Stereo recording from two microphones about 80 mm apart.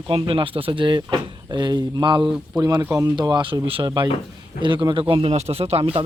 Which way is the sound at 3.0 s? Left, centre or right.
Right.